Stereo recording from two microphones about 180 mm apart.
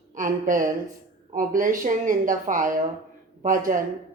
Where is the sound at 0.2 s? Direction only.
50° right (ahead or behind).